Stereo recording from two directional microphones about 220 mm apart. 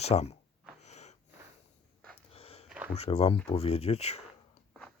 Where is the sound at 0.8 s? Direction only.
30° left (ahead or behind).